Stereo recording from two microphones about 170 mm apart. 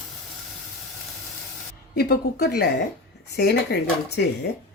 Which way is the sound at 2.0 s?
70° left (ahead or behind).